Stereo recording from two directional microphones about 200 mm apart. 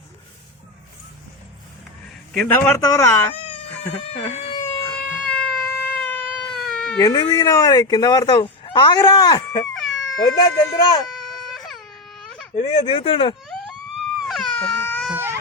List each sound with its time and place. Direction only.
2.3 s a man's voice: centre (ahead or behind)
2.6 s speech: 15° left (ahead or behind)
4.1 s speech: 30° left (ahead or behind)
4.6 s baby cry: 10° left (ahead or behind)
7.0 s speech: 20° left (ahead or behind)
11.1 s baby cry: 5° left (ahead or behind)
12.5 s speech: 30° left (ahead or behind)
13.5 s a sound: 5° left (ahead or behind)
14.3 s baby cry: centre (ahead or behind)
15.0 s baby cry: 10° right (ahead or behind)